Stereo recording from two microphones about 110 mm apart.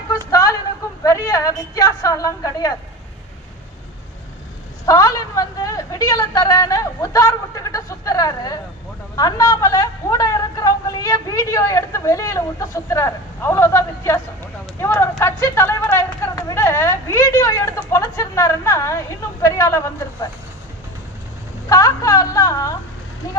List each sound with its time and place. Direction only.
0.3 s a sound: 30° left (ahead or behind)
1.0 s a woman's voice: 30° left (ahead or behind)
4.9 s a woman's voice: 30° left (ahead or behind)
21.7 s a woman's voice: 30° left (ahead or behind)